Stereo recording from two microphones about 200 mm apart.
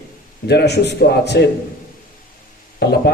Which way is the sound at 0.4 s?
55° left (ahead or behind).